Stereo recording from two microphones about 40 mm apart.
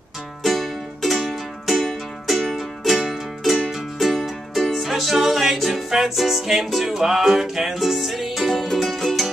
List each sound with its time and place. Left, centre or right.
0.4 s music: centre